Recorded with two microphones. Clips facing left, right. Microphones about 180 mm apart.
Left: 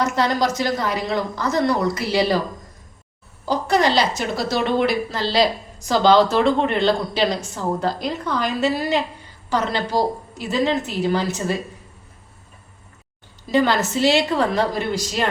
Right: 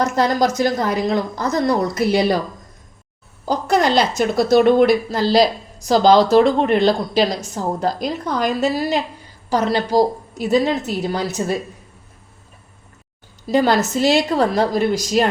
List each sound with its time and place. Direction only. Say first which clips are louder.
0.0 s a woman's voice: right 3 dB; 45° right (ahead or behind)
3.4 s a woman's voice: right 1 dB; 45° right (ahead or behind)
13.5 s a woman's voice: right 2 dB; 40° right (ahead or behind)